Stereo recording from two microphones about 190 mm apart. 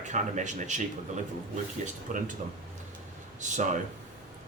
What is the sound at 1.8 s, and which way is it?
Speech, 40° right (ahead or behind).